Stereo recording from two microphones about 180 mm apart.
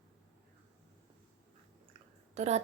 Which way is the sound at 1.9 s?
40° right (ahead or behind).